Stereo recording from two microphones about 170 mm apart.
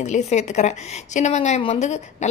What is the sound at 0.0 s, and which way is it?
A woman's voice, 45° left (ahead or behind).